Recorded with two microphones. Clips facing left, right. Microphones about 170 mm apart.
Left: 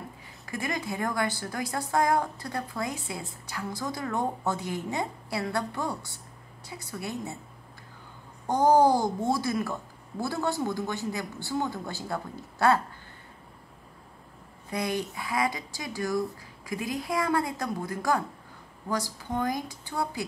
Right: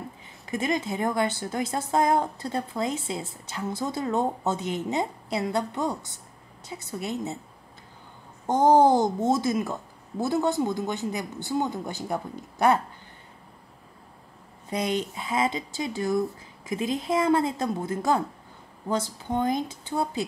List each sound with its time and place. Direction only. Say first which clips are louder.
0.5 s a woman's voice: right 5 dB; 20° right (ahead or behind)
8.5 s a woman's voice: right 2 dB; 20° right (ahead or behind)
14.7 s a woman's voice: right 3 dB; 20° right (ahead or behind)